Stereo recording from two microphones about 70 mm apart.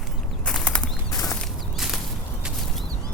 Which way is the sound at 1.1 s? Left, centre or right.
Left.